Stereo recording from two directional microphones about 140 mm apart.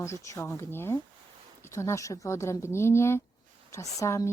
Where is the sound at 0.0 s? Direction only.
20° left (ahead or behind).